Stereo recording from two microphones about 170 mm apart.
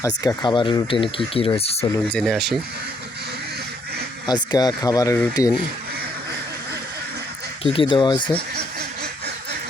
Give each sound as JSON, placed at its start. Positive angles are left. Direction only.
{"t": 0.0, "sound": "speech", "side_deg": 20}
{"t": 2.0, "sound": "speech", "side_deg": 5}
{"t": 4.3, "sound": "speech", "side_deg": 25}
{"t": 7.6, "sound": "speech", "side_deg": 30}